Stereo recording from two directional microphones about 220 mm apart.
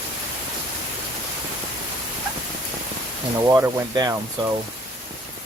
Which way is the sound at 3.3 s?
15° right (ahead or behind).